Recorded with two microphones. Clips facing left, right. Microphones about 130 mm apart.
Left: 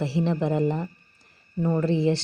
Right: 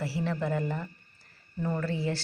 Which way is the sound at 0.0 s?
20° left (ahead or behind).